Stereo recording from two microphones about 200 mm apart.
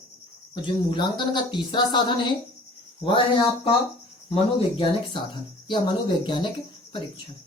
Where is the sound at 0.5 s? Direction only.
20° left (ahead or behind).